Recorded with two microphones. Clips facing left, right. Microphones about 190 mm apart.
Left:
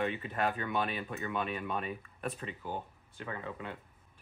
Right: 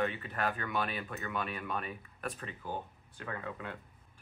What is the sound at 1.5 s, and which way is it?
Speech, centre (ahead or behind).